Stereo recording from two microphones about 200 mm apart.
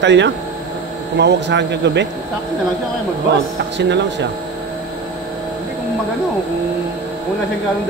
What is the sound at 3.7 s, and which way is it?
Speech, 60° right (ahead or behind).